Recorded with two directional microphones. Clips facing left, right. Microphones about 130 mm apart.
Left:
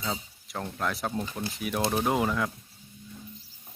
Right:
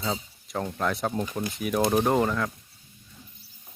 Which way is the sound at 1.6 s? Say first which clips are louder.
Right 5 dB; centre (ahead or behind).